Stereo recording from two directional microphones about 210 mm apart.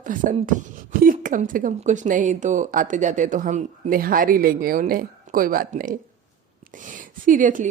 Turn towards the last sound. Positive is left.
turn(degrees=-40)  # may be behind; listen again after turning